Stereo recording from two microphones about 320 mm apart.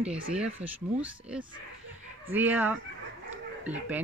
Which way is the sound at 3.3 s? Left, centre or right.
Centre.